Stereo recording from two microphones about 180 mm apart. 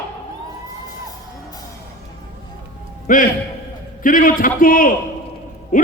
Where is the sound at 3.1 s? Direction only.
50° left (ahead or behind).